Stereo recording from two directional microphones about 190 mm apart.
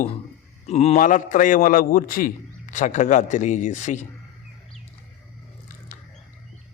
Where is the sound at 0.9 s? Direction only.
45° left (ahead or behind).